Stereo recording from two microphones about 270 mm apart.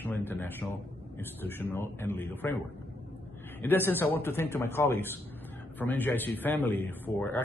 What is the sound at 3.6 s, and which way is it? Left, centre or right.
Speech, centre.